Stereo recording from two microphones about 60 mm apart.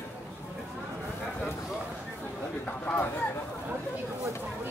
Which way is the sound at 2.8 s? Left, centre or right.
Left.